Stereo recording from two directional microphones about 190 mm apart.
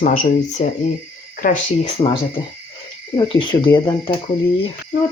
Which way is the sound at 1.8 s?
25° left (ahead or behind).